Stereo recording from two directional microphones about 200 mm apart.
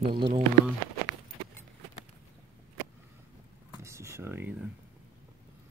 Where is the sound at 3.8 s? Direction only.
15° right (ahead or behind).